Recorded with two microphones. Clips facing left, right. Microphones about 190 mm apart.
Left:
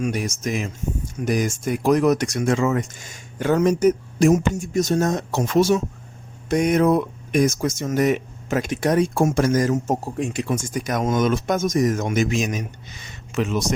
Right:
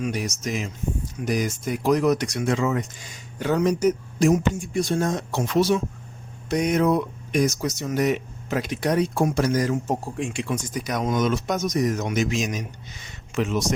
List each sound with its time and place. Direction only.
0.0 s speech: 50° left (ahead or behind)